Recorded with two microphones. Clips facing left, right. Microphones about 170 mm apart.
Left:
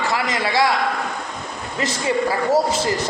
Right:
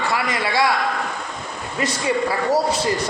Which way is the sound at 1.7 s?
25° left (ahead or behind).